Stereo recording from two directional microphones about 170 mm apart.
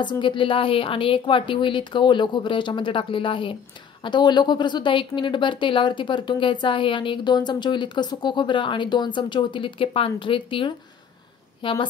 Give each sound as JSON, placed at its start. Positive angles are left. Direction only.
{"t": 0.0, "sound": "a woman's voice", "side_deg": 25}